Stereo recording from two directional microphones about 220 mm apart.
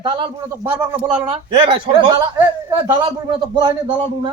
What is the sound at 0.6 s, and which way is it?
Speech, 10° right (ahead or behind).